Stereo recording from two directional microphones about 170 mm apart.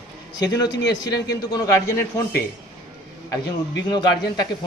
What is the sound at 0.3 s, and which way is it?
A man's voice, 20° left (ahead or behind).